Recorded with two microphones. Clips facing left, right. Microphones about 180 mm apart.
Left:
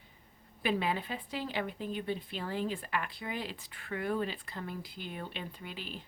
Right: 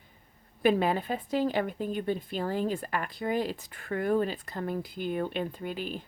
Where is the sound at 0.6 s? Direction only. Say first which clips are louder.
Right 7 dB; 45° right (ahead or behind).